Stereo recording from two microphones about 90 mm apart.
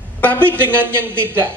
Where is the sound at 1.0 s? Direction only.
25° right (ahead or behind).